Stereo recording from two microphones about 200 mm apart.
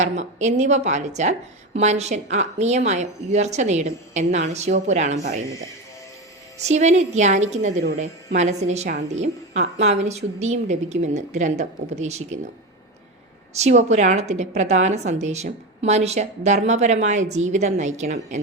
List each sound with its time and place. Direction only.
0.0 s a woman's voice: 35° right (ahead or behind)
6.7 s a woman's voice: 35° right (ahead or behind)
13.5 s a woman's voice: 35° right (ahead or behind)